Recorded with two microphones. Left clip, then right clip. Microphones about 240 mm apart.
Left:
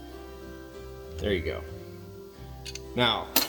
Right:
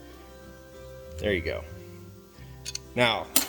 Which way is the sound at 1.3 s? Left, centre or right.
Right.